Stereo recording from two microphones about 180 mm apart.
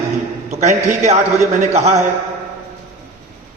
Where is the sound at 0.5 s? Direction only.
40° right (ahead or behind).